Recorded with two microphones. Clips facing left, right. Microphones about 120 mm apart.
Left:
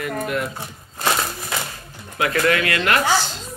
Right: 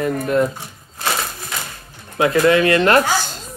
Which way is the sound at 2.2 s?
25° right (ahead or behind).